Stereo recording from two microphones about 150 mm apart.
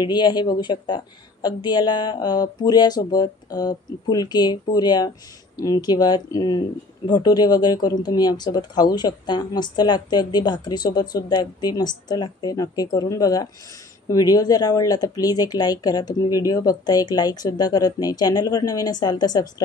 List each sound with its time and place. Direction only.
0.0 s speech: 30° left (ahead or behind)